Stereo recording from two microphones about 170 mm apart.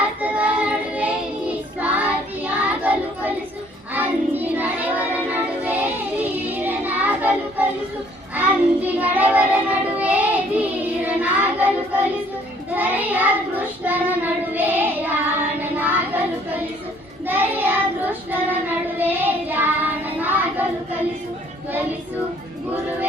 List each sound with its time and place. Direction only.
0.2 s child singing: 10° right (ahead or behind)
6.4 s music: 10° right (ahead or behind)
8.4 s child singing: 10° right (ahead or behind)